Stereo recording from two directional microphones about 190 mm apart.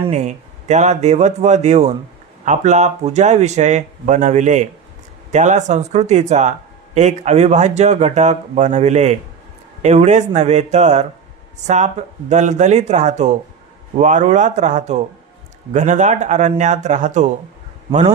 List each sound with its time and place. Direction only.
0.1 s speech: 35° right (ahead or behind)